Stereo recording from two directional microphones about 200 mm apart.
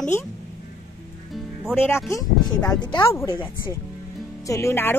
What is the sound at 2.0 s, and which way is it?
Speech, 15° left (ahead or behind).